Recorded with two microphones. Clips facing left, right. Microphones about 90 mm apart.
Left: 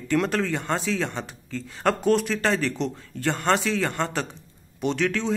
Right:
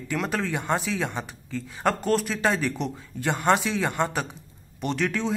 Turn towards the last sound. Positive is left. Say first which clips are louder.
# left 2 dB
turn(degrees=0)  # may be behind; listen again after turning